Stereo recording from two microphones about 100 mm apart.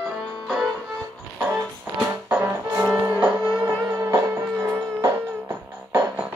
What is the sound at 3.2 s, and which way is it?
Music, 5° right (ahead or behind).